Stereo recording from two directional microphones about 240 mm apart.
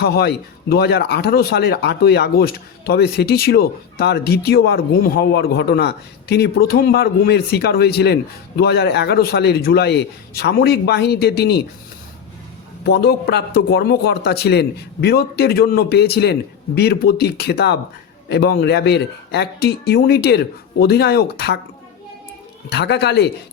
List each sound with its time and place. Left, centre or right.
0.0 s speech: left
12.8 s a man's voice: left
22.7 s a man's voice: left